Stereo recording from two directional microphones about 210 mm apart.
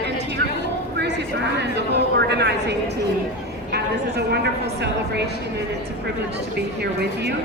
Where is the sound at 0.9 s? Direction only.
55° right (ahead or behind).